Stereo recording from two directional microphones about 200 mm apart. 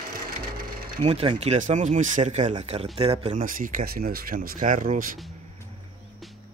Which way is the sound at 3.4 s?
40° right (ahead or behind).